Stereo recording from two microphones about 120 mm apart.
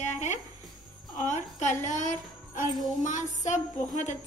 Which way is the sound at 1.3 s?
85° left.